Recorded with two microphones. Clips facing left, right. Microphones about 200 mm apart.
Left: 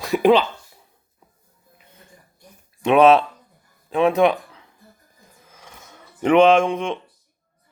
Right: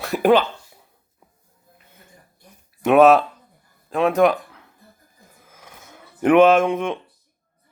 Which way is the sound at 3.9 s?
Centre (ahead or behind).